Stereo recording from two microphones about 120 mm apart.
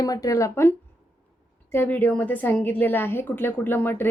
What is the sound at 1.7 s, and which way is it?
A woman's voice, 15° left (ahead or behind).